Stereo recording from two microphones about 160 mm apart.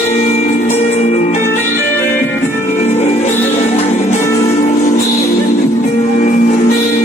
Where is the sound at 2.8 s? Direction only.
45° left (ahead or behind).